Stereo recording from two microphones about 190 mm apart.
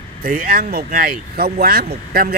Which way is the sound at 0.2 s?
50° right (ahead or behind).